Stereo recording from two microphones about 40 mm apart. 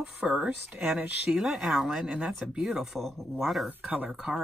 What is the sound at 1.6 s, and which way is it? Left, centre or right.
Speech, centre.